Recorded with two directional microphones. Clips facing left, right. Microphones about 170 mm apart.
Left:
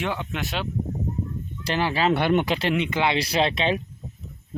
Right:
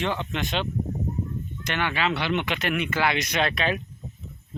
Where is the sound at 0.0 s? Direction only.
5° left (ahead or behind).